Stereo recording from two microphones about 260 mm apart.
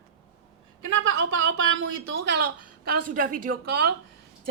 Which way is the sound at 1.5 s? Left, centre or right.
Right.